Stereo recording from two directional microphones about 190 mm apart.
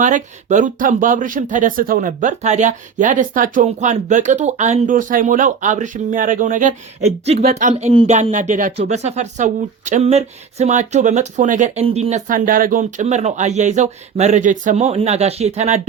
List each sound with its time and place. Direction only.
0.0 s speech: 40° right (ahead or behind)